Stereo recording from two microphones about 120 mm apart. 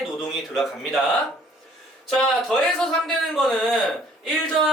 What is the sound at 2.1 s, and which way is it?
Speech, 5° left (ahead or behind).